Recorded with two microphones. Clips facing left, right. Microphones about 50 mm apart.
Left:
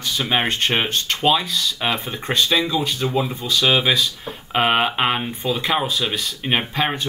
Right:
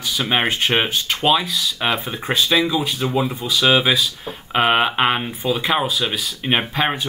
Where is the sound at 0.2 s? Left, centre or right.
Centre.